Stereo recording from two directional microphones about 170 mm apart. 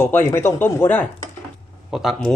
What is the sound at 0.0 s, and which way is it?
Speech, 10° left (ahead or behind).